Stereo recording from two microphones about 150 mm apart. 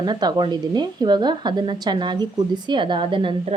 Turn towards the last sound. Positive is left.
turn(degrees=-35)  # may be behind; listen again after turning